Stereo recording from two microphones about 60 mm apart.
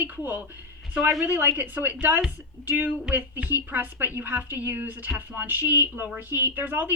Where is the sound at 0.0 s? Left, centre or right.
Right.